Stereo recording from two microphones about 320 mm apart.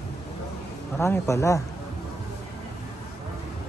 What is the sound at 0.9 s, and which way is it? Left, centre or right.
Speech, centre.